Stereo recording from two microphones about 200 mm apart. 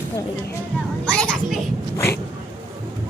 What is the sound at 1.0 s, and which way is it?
Children playing, 5° left (ahead or behind).